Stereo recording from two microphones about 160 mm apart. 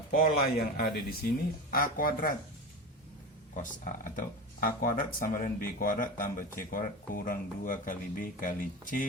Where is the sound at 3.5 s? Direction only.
55° left (ahead or behind).